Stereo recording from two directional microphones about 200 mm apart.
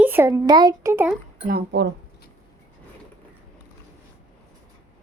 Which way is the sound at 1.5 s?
55° right (ahead or behind).